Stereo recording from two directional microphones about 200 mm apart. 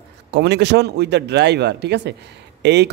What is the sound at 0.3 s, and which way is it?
Speech, 60° right (ahead or behind).